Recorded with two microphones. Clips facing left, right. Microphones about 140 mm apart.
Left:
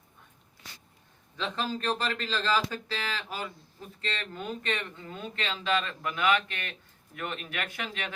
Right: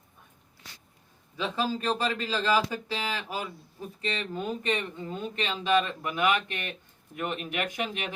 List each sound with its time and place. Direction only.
1.4 s speech: 10° right (ahead or behind)